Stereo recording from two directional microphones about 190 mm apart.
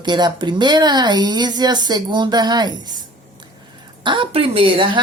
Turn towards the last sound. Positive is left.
turn(degrees=-25)  # may be behind; listen again after turning